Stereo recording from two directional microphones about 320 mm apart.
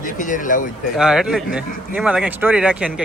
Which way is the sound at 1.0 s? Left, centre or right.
Centre.